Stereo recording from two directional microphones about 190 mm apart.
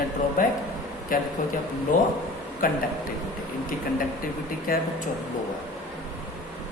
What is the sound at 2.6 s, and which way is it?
Speech, 45° left (ahead or behind).